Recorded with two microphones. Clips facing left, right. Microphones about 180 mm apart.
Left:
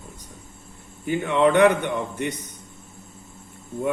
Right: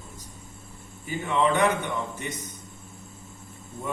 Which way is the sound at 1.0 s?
65° left (ahead or behind).